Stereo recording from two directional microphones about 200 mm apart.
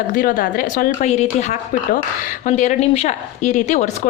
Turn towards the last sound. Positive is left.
turn(degrees=35)  # may be behind; listen again after turning